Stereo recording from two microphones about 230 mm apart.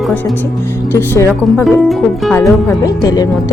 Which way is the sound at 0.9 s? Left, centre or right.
Centre.